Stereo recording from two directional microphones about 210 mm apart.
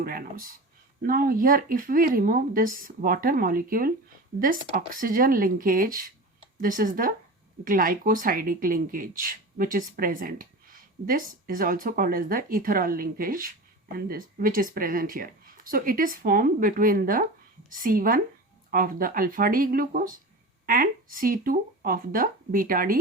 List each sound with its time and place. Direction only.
0.0 s speech: 45° right (ahead or behind)